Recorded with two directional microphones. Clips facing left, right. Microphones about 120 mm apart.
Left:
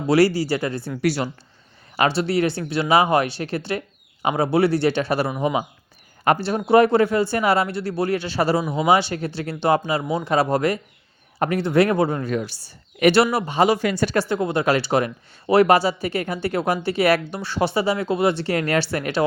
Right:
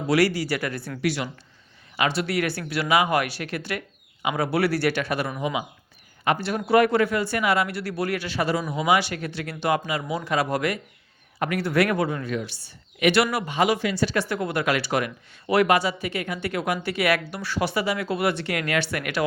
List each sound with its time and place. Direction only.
0.1 s a man's voice: 30° left (ahead or behind)
4.4 s a man's voice: 25° left (ahead or behind)
13.8 s speech: 45° left (ahead or behind)
14.3 s speech: 25° left (ahead or behind)